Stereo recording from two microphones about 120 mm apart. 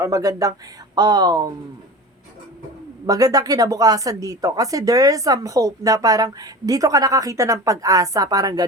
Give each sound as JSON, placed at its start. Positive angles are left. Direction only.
{"t": 0.0, "sound": "speech", "side_deg": -30}
{"t": 3.1, "sound": "speech", "side_deg": -30}